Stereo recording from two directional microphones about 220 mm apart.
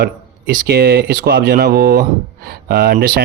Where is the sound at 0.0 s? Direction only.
45° right (ahead or behind).